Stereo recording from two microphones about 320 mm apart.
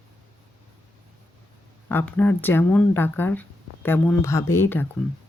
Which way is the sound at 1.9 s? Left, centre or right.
Centre.